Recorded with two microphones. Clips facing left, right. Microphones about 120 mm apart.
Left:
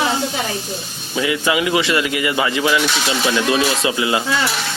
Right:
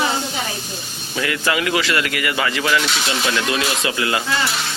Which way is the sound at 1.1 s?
15° left (ahead or behind).